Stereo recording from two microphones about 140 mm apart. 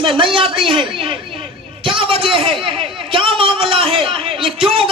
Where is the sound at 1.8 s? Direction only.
40° right (ahead or behind).